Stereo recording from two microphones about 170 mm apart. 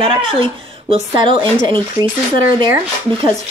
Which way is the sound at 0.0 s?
30° right (ahead or behind).